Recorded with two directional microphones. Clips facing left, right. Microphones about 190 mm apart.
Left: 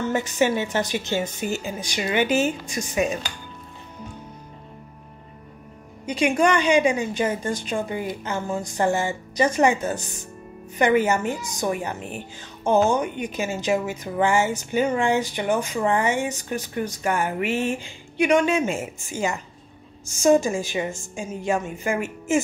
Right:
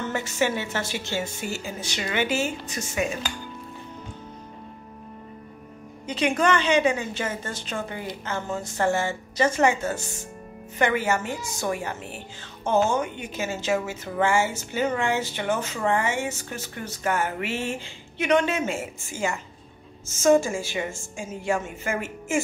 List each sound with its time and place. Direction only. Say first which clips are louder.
0.0 s a woman's voice: left 4 dB; 15° left (ahead or behind)
6.0 s a woman's voice: left 3 dB; 10° left (ahead or behind)